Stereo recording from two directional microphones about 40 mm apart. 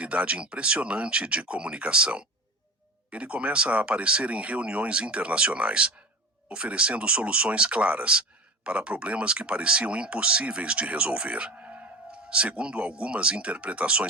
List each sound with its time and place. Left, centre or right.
0.0 s speech: right